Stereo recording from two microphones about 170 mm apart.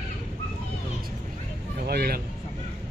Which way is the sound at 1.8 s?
65° right (ahead or behind).